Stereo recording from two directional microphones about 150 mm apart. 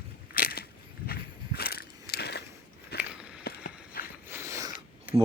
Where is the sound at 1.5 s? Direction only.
90° left.